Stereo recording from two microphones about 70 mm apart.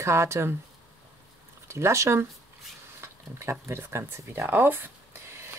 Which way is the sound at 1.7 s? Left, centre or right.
Right.